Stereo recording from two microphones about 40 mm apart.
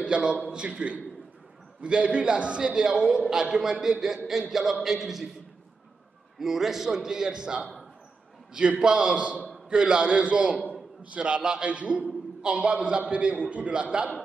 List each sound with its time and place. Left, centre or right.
0.0 s a man's voice: right
3.0 s a man's voice: centre
6.4 s a man's voice: centre
8.8 s a man's voice: right